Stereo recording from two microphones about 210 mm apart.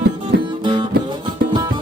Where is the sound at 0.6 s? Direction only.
20° right (ahead or behind).